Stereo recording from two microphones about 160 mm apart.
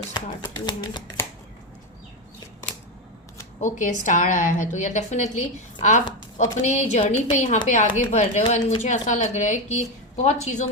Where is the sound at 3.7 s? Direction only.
55° left (ahead or behind).